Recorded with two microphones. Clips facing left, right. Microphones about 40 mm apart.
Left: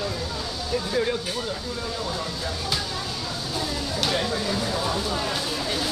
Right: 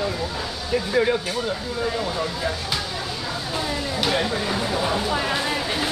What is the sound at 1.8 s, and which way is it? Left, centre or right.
Speech, right.